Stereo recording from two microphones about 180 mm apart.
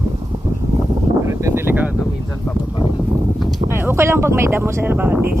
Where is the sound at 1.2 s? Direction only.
15° right (ahead or behind).